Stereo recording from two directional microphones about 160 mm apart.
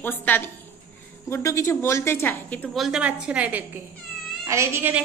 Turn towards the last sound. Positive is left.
turn(degrees=-15)  # may be behind; listen again after turning